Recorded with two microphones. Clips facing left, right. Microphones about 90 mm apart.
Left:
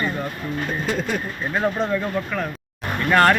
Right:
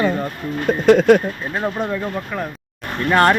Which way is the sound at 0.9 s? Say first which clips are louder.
Right 16 dB; 75° right (ahead or behind).